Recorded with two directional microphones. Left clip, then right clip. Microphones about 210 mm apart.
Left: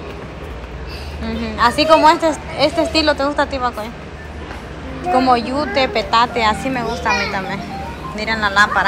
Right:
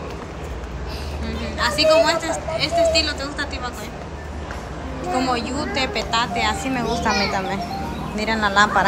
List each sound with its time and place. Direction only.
1.2 s a woman's voice: centre (ahead or behind)
5.1 s a woman's voice: 5° right (ahead or behind); by 8.8 s 20° right (ahead or behind)